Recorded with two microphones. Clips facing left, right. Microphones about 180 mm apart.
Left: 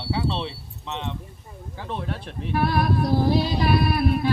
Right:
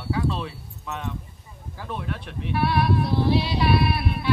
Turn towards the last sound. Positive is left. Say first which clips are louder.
# left 4 dB
turn(degrees=40)  # may be behind; listen again after turning